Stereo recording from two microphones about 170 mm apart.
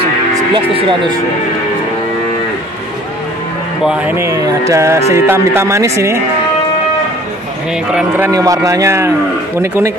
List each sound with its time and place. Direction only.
0.6 s speech: 30° right (ahead or behind)
3.8 s speech: 5° right (ahead or behind)
8.3 s speech: 20° right (ahead or behind)